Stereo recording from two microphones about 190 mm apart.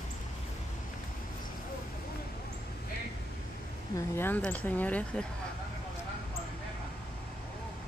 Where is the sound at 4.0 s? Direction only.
10° left (ahead or behind).